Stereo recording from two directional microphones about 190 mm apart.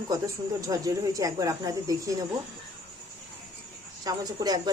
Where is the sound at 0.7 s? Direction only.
15° right (ahead or behind).